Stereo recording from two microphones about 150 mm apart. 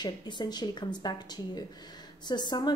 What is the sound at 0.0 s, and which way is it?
A woman's voice, 30° left (ahead or behind).